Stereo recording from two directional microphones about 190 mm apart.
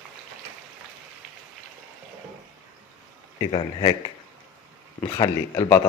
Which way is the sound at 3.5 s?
25° left (ahead or behind).